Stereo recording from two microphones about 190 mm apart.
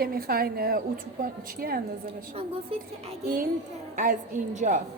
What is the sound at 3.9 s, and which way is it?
Speech, 45° right (ahead or behind).